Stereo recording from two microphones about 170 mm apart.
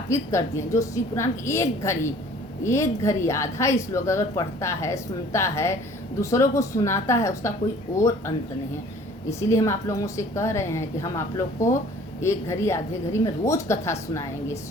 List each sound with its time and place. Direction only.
0.1 s a woman's voice: 15° left (ahead or behind)
9.4 s a woman's voice: 15° left (ahead or behind)
12.2 s a woman's voice: 15° left (ahead or behind)